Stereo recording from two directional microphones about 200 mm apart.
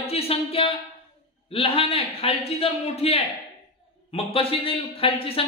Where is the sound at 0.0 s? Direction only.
30° left (ahead or behind).